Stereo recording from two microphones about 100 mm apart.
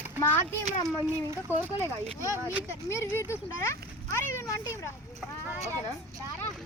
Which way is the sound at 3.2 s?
30° left (ahead or behind).